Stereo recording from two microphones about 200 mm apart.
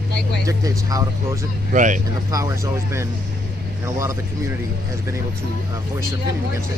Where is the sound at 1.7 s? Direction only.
40° right (ahead or behind).